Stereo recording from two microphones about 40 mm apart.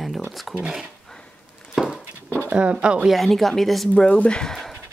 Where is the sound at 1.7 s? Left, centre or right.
Centre.